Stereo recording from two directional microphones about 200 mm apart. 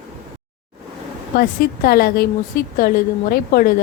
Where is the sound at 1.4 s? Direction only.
50° left (ahead or behind).